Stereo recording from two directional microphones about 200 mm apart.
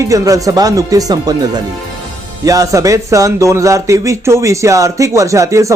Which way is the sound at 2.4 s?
15° right (ahead or behind).